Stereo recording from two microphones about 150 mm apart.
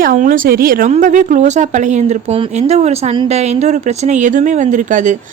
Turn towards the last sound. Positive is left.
turn(degrees=-55)  # may be behind; listen again after turning